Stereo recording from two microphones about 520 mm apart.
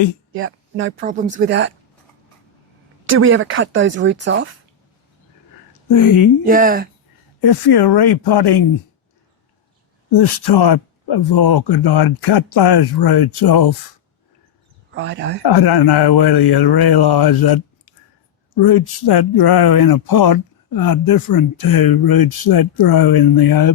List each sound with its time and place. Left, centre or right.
0.3 s speech: right
3.1 s speech: right
5.9 s speech: left
6.4 s speech: centre
7.4 s speech: left
10.2 s speech: left
14.9 s speech: centre
15.4 s speech: left
18.6 s speech: left